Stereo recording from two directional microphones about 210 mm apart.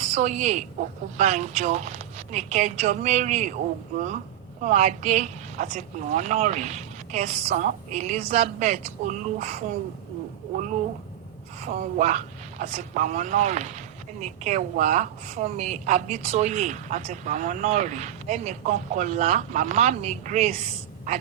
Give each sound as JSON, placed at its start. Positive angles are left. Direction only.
{"t": 0.0, "sound": "a woman's voice", "side_deg": -35}
{"t": 4.6, "sound": "a woman's voice", "side_deg": -35}
{"t": 11.6, "sound": "a woman's voice", "side_deg": -35}